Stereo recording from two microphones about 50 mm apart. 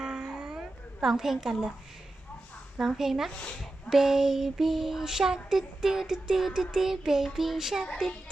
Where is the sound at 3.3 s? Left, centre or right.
Left.